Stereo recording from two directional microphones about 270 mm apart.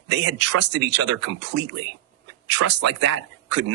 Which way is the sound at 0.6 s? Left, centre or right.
Right.